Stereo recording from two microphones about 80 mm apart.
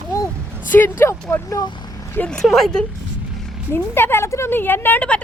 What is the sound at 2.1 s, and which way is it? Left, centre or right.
Speech, centre.